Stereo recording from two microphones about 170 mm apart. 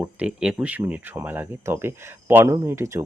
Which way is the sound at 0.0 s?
5° right (ahead or behind).